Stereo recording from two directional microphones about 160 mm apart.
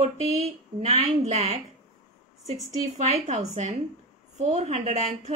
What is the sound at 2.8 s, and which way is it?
A woman's voice, 50° right (ahead or behind).